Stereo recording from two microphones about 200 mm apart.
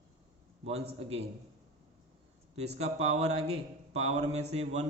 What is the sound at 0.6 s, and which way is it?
Speech, 30° right (ahead or behind).